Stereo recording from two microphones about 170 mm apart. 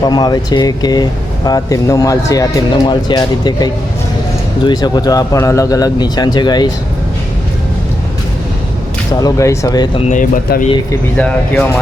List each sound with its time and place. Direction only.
0.0 s speech: 25° left (ahead or behind)
9.2 s speech: 20° left (ahead or behind)
10.1 s speech: 50° left (ahead or behind)
11.2 s speech: 10° left (ahead or behind)